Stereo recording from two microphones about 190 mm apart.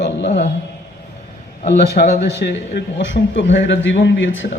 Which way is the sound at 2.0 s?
45° left (ahead or behind).